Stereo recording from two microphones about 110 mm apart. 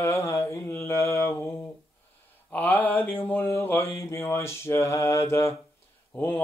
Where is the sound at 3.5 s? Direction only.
25° left (ahead or behind).